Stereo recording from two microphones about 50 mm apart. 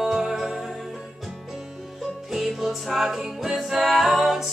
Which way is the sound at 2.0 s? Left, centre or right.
Centre.